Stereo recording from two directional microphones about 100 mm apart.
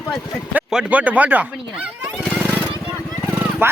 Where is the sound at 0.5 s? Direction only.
10° right (ahead or behind).